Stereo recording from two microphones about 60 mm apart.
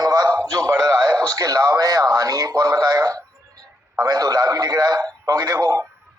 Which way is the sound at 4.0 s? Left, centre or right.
Right.